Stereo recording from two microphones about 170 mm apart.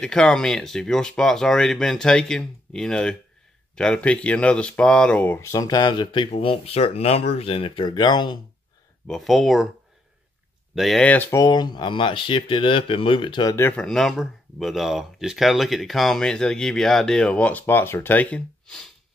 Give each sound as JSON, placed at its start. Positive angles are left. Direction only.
{"t": 0.0, "sound": "speech", "side_deg": 5}
{"t": 9.0, "sound": "speech", "side_deg": 0}
{"t": 10.7, "sound": "speech", "side_deg": 0}